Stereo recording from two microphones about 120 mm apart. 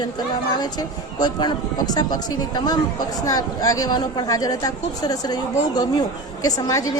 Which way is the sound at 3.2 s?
30° left (ahead or behind).